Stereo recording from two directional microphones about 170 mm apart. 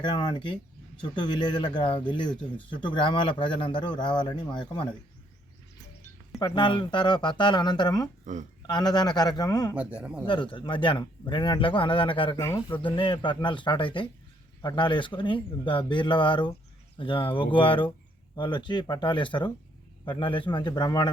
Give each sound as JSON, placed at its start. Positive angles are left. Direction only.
{"t": 0.0, "sound": "a man's voice", "side_deg": 25}
{"t": 6.4, "sound": "a man's voice", "side_deg": 25}
{"t": 8.2, "sound": "speech", "side_deg": -45}
{"t": 8.6, "sound": "a man's voice", "side_deg": 25}
{"t": 9.7, "sound": "speech", "side_deg": -5}
{"t": 10.2, "sound": "a man's voice", "side_deg": 30}
{"t": 12.4, "sound": "speech", "side_deg": 15}
{"t": 12.7, "sound": "a man's voice", "side_deg": 30}